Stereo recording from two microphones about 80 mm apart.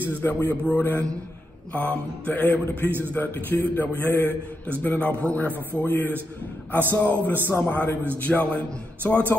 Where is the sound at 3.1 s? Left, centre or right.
Left.